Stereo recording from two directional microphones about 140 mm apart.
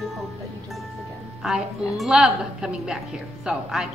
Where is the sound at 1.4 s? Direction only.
Centre (ahead or behind).